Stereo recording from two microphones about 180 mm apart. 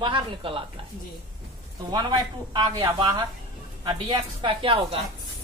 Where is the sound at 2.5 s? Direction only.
20° right (ahead or behind).